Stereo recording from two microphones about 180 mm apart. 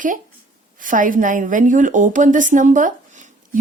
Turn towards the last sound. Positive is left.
turn(degrees=-40)  # may be behind; listen again after turning